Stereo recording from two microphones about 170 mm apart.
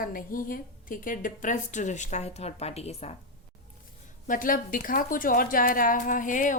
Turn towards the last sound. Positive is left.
turn(degrees=50)  # may be behind; listen again after turning